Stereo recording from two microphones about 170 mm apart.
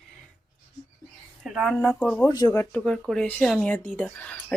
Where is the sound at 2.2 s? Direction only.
25° left (ahead or behind).